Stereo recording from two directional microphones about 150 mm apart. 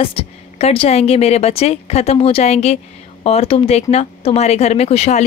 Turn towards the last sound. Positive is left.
turn(degrees=45)  # may be behind; listen again after turning